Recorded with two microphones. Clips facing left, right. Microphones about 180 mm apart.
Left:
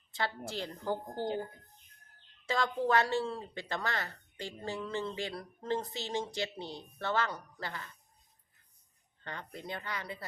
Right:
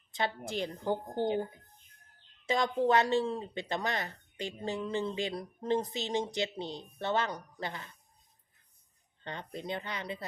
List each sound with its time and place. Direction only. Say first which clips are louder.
0.1 s a woman's voice: right 3 dB; 20° right (ahead or behind)
2.5 s speech: right 3 dB; 20° right (ahead or behind)
9.2 s speech: right 4 dB; 20° right (ahead or behind)